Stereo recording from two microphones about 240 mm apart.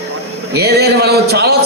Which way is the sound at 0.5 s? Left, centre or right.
Right.